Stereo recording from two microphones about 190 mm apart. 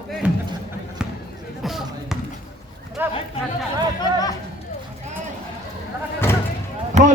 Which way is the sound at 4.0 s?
20° left (ahead or behind).